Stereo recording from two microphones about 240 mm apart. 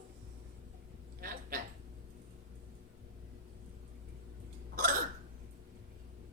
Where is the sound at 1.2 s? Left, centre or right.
Right.